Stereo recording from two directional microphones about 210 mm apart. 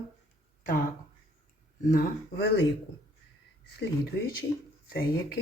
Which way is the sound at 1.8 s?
40° left (ahead or behind).